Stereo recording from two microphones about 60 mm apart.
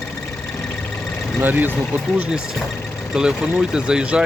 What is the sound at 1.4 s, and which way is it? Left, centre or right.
Speech, right.